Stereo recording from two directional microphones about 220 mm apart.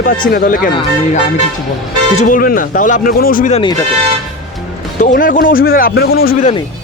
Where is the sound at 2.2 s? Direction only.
40° left (ahead or behind).